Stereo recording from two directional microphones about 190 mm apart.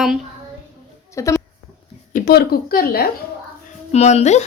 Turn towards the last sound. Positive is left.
turn(degrees=35)  # may be behind; listen again after turning